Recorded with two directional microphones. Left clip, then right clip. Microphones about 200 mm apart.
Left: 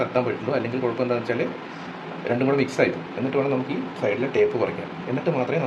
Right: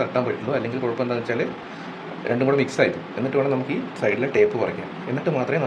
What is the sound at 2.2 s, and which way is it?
Speech, 15° right (ahead or behind).